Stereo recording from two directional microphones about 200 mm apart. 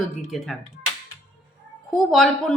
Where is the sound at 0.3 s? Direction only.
Centre (ahead or behind).